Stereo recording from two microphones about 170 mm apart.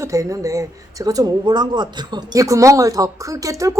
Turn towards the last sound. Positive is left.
turn(degrees=-20)  # may be behind; listen again after turning